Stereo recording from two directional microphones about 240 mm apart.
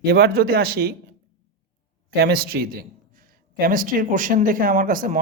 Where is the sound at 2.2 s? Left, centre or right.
Right.